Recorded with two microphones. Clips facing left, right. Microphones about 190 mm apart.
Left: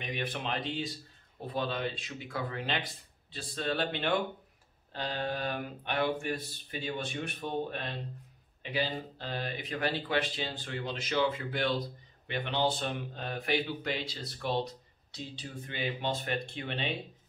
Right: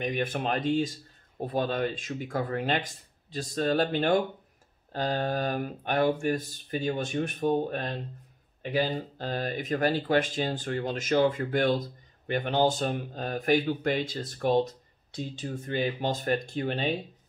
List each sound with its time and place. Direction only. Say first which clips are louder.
0.0 s speech: right 7 dB; 45° right (ahead or behind)